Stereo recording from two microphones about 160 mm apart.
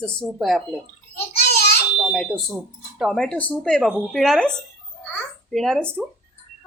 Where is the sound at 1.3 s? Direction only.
85° left.